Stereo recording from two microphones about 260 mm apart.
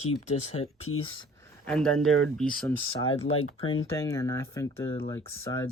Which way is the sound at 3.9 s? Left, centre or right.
Centre.